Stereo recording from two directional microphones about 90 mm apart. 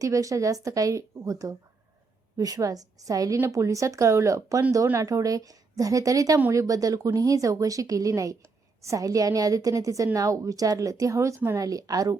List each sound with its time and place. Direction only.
0.0 s a woman's voice: 40° right (ahead or behind)